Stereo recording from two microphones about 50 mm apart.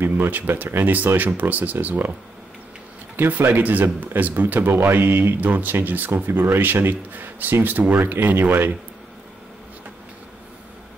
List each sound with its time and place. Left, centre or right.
0.0 s speech: right
3.2 s speech: right